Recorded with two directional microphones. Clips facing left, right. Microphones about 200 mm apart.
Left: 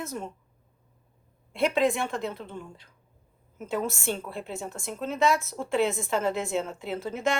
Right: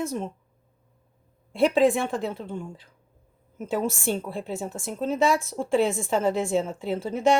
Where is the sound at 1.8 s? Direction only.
30° right (ahead or behind).